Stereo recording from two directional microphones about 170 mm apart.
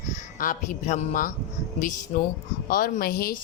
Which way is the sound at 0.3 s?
50° left (ahead or behind).